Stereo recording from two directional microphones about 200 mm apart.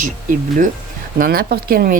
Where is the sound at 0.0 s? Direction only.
40° right (ahead or behind).